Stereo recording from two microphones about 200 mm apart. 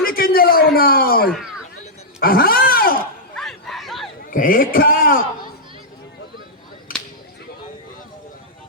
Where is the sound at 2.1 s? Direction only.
50° left (ahead or behind).